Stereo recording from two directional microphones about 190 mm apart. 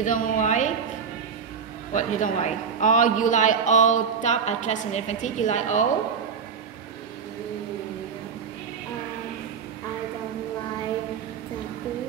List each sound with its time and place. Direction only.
0.0 s a man's voice: 45° left (ahead or behind)
2.0 s a man's voice: 40° left (ahead or behind)